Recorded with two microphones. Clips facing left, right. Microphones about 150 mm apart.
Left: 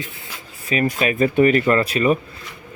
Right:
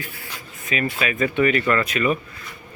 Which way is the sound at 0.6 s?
40° left (ahead or behind).